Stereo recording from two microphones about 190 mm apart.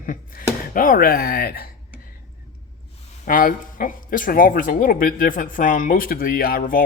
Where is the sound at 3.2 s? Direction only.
45° left (ahead or behind).